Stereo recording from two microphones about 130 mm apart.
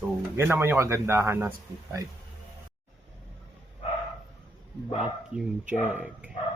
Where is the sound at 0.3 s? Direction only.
15° right (ahead or behind).